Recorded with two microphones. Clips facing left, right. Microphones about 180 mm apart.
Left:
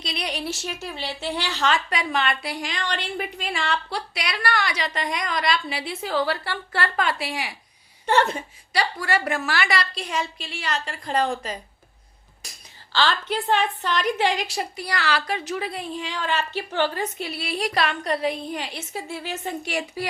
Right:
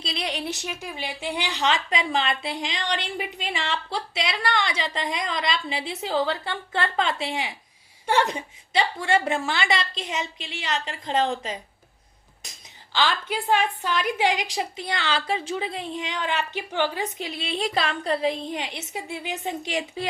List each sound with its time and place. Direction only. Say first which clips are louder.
0.0 s a woman's voice: even; 25° right (ahead or behind)
8.0 s a woman's voice: left 2 dB; 15° right (ahead or behind)